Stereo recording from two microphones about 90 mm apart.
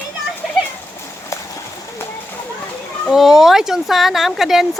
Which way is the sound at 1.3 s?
35° left (ahead or behind).